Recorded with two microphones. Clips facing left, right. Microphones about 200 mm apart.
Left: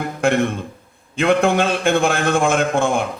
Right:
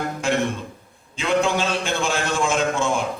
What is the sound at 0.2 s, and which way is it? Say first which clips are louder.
A man's voice: left 7 dB; 55° left (ahead or behind).